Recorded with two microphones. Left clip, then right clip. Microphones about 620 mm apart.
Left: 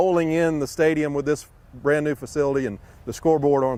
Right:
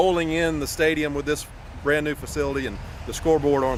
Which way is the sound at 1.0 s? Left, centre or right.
Left.